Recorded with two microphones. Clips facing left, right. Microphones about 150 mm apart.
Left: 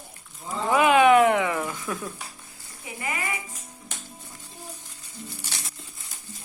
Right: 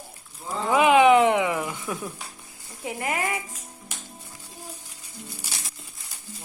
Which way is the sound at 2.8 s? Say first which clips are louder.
Right 4 dB; 85° right.